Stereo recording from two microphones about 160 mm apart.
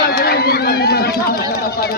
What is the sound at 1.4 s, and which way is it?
Speech, 85° left.